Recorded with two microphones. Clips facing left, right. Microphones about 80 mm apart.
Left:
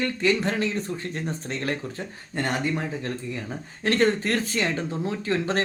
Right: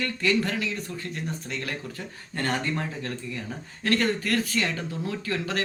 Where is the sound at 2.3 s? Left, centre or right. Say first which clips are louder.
Left 2 dB; centre.